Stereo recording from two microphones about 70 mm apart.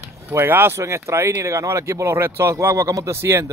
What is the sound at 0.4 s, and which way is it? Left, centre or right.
Speech, right.